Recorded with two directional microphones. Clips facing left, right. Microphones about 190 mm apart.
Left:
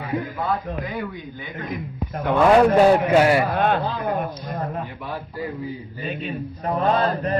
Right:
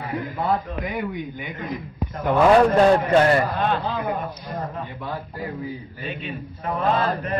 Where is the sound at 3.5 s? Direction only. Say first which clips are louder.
Left 3 dB; 55° left (ahead or behind).